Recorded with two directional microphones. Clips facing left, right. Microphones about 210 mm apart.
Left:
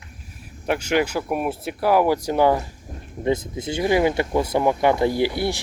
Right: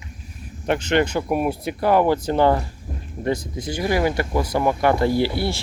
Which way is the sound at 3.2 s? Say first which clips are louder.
Left 1 dB; 20° left (ahead or behind).